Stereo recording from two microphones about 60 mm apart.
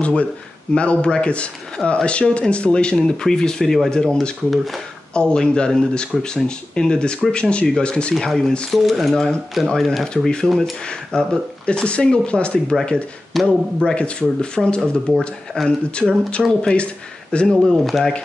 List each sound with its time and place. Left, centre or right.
0.0 s speech: left
13.3 s speech: centre
13.9 s speech: centre
15.1 s speech: centre
16.0 s speech: centre
17.5 s speech: centre